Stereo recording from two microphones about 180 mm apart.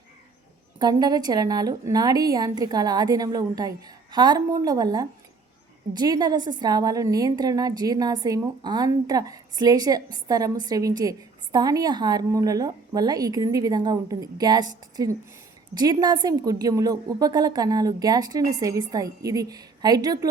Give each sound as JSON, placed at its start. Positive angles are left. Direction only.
{"t": 0.8, "sound": "a woman's voice", "side_deg": -20}